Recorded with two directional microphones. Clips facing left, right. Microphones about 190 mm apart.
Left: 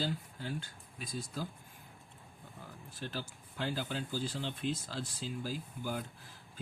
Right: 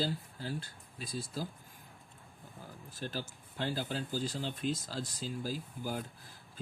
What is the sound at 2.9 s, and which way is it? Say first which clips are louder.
Speech: right 2 dB; 40° right (ahead or behind).